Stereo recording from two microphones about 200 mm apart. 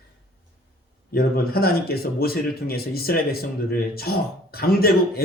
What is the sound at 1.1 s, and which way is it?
Speech, 50° left (ahead or behind).